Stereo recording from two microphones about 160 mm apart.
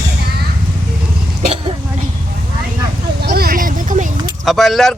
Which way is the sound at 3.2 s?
65° right (ahead or behind).